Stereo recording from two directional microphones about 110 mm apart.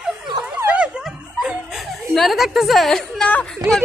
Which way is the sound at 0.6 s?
10° right (ahead or behind).